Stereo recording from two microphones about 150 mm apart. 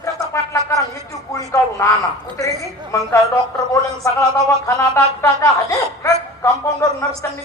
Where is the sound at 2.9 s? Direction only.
20° left (ahead or behind).